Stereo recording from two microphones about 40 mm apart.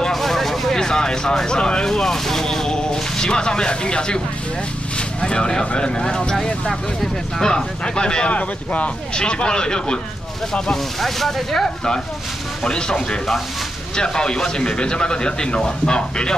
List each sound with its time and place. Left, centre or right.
0.1 s a sound: centre
1.6 s a man's voice: left
1.9 s speech: centre
5.2 s a man's voice: centre
9.1 s a man's voice: left
11.0 s speech: centre
12.6 s a man's voice: centre